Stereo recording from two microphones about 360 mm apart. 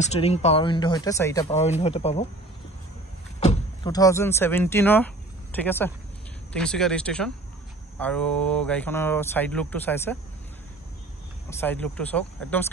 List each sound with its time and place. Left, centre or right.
0.0 s speech: centre
3.3 s speech: centre
11.6 s speech: centre